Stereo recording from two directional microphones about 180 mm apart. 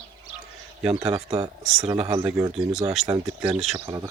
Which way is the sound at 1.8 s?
30° right (ahead or behind).